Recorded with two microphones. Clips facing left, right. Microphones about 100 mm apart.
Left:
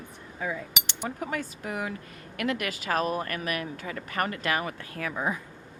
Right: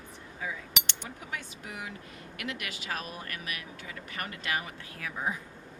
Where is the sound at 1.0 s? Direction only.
50° left (ahead or behind); by 5.4 s 65° left (ahead or behind).